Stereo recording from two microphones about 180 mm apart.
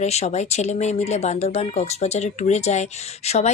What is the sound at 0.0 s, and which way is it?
Speech, 35° left (ahead or behind).